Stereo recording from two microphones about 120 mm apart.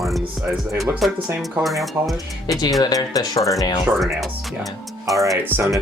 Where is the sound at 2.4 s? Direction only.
35° left (ahead or behind).